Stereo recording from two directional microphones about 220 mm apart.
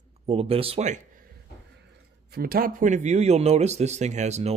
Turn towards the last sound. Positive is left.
turn(degrees=-30)  # may be behind; listen again after turning